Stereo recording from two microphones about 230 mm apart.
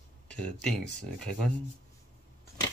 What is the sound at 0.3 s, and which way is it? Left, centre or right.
Speech, centre.